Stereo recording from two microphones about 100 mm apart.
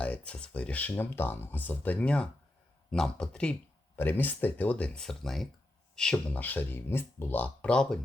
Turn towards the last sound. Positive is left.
turn(degrees=10)  # may be behind; listen again after turning